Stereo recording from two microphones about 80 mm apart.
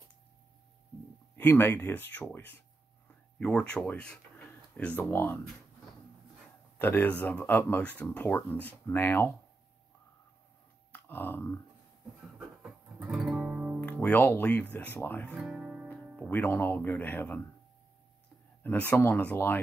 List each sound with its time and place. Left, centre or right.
1.3 s speech: left
3.1 s a sound: centre
3.8 s speech: centre
6.8 s speech: left
10.9 s a sound: left
13.0 s music: centre
14.1 s speech: left
15.5 s music: centre
16.2 s speech: left
18.6 s speech: left